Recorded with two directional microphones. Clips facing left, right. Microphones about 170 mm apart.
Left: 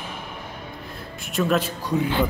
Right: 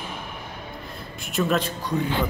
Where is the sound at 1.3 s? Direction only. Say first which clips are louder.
Left 1 dB; centre (ahead or behind).